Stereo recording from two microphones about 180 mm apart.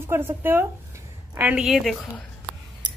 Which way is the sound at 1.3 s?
10° right (ahead or behind).